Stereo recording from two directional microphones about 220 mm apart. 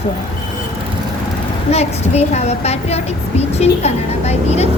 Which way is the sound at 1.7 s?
30° left (ahead or behind).